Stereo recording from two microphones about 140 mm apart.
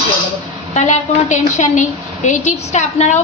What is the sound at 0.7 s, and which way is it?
A woman's voice, 60° left (ahead or behind).